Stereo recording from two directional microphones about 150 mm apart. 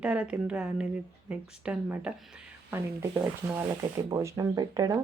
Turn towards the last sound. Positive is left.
turn(degrees=-20)  # may be behind; listen again after turning